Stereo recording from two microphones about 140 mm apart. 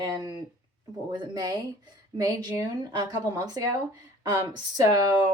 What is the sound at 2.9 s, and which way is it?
Speech, 30° right (ahead or behind).